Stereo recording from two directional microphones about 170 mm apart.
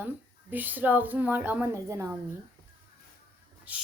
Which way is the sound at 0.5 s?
10° right (ahead or behind).